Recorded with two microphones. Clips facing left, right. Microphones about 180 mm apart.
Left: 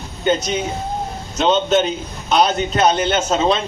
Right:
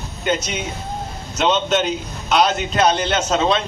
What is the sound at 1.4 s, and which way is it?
A man's voice, 30° left (ahead or behind).